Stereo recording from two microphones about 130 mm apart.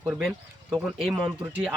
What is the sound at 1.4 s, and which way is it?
Speech, 10° right (ahead or behind).